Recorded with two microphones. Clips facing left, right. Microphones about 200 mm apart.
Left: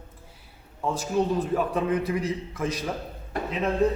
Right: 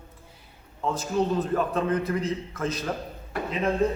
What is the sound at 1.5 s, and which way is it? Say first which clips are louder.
A man's voice: left 1 dB; 10° left (ahead or behind).